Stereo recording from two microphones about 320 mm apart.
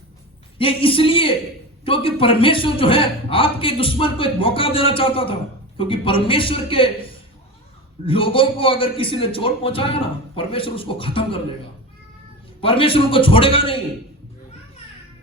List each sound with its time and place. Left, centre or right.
0.6 s a man's voice: centre
12.6 s a man's voice: centre